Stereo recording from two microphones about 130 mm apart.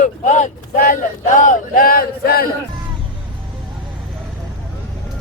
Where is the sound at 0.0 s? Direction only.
70° left (ahead or behind); by 2.0 s 90° left.